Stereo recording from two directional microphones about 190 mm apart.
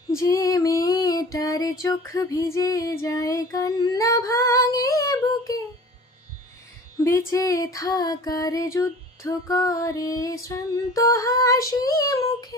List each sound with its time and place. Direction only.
0.2 s music: 15° left (ahead or behind)
7.0 s music: 15° left (ahead or behind)